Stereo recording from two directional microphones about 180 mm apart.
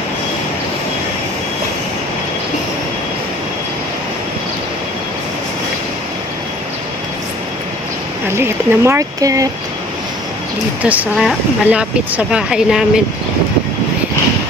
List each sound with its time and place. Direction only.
8.4 s speech: 15° right (ahead or behind)
10.8 s speech: 10° right (ahead or behind)